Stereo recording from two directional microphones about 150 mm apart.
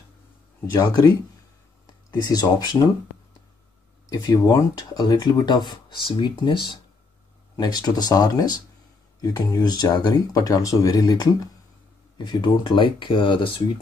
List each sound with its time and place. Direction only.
0.7 s speech: 25° left (ahead or behind)
4.1 s speech: 25° left (ahead or behind)